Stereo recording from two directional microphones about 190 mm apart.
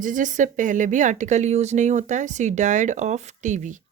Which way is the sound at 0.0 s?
45° right (ahead or behind).